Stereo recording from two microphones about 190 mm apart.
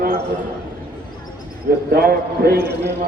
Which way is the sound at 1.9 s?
55° right (ahead or behind).